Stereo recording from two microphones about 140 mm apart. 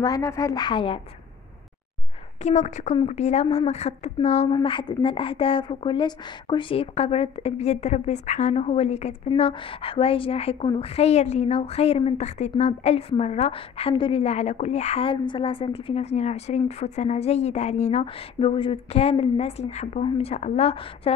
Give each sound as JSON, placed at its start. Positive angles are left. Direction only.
{"t": 0.0, "sound": "a woman's voice", "side_deg": 25}
{"t": 2.4, "sound": "a woman's voice", "side_deg": 55}
{"t": 4.6, "sound": "a woman's voice", "side_deg": 35}
{"t": 9.4, "sound": "a woman's voice", "side_deg": 40}
{"t": 18.0, "sound": "a woman's voice", "side_deg": 40}